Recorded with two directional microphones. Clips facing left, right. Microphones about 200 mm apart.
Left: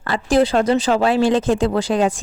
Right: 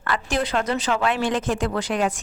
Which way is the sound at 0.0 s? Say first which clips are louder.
Left 8 dB; 30° left (ahead or behind).